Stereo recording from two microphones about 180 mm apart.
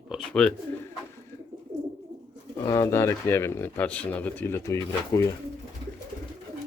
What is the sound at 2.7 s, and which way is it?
Speech, 15° left (ahead or behind).